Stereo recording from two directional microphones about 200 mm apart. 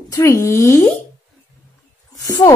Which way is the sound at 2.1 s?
15° left (ahead or behind).